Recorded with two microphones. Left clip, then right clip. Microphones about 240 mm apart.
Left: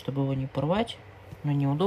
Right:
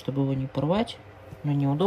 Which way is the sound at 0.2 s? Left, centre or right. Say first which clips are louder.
Right 2 dB; centre.